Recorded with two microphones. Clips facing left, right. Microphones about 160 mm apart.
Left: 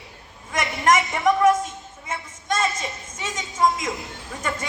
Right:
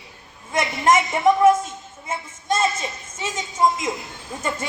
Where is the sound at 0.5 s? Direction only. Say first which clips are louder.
Right 2 dB; 30° right (ahead or behind).